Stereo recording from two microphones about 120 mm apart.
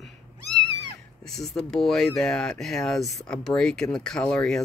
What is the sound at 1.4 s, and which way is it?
Speech, centre (ahead or behind).